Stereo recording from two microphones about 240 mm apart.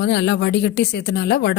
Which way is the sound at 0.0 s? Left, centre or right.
Left.